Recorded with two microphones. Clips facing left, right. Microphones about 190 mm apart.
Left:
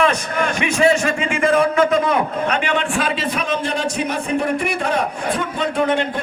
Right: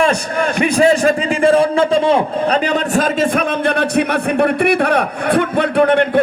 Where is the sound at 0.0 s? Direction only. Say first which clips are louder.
Right 3 dB; 35° right (ahead or behind).